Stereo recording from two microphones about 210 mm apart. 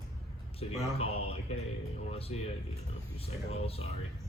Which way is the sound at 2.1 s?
30° left (ahead or behind).